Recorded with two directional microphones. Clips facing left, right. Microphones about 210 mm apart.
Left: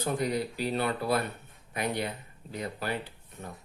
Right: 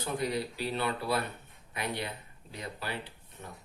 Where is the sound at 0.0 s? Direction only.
50° left (ahead or behind).